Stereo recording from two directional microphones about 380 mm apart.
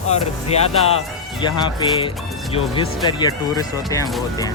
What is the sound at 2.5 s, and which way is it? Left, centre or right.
Speech, centre.